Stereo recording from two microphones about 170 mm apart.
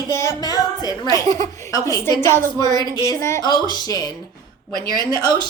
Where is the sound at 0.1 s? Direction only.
20° left (ahead or behind).